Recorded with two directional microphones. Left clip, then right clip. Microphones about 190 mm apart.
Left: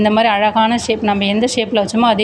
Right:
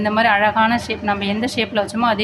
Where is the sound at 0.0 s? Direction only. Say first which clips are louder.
Left 2 dB; 25° left (ahead or behind).